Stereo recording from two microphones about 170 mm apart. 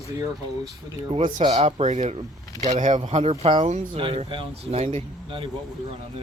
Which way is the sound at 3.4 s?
25° right (ahead or behind).